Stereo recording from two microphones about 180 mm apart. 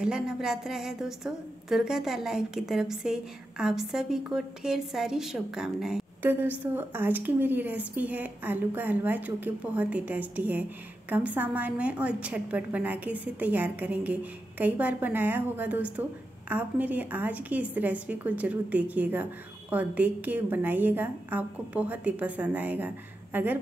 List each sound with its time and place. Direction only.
0.0 s a woman's voice: 5° right (ahead or behind)